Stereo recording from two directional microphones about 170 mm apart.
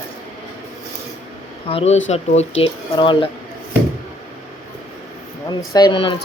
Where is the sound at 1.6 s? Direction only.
35° left (ahead or behind).